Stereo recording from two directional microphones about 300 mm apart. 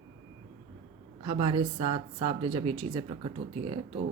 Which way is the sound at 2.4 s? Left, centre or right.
Right.